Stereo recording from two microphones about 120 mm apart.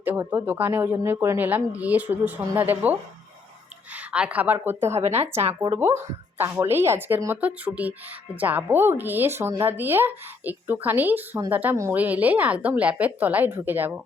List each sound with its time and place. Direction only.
0.0 s speech: 15° right (ahead or behind)
4.9 s speech: 60° right (ahead or behind)
5.7 s speech: 20° right (ahead or behind)